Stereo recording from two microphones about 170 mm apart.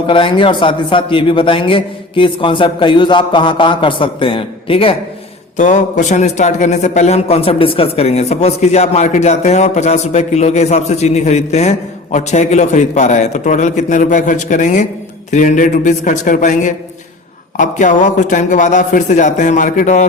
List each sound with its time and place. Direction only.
0.1 s a man's voice: 30° left (ahead or behind)
5.5 s a man's voice: 45° left (ahead or behind)